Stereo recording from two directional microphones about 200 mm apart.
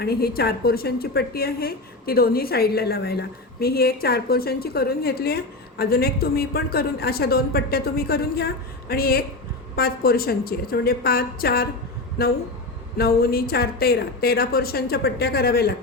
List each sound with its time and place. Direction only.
0.0 s a woman's voice: 50° left (ahead or behind)